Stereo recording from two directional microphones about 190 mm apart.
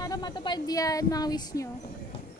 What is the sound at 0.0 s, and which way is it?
Speech, 20° left (ahead or behind).